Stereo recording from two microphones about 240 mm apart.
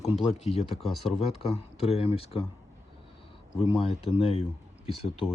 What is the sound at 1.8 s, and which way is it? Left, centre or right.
Speech, left.